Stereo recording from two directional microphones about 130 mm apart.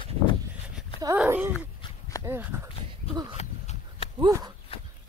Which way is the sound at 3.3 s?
55° left (ahead or behind).